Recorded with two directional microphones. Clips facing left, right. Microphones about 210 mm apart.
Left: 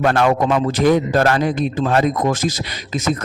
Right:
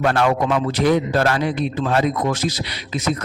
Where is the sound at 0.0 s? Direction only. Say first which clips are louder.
Left 2 dB; 45° left (ahead or behind).